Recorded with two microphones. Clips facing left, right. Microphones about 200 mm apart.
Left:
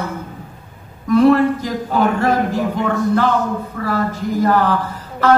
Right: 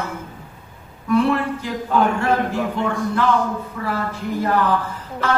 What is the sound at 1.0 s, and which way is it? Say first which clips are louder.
Speech: left 6 dB; 40° left (ahead or behind).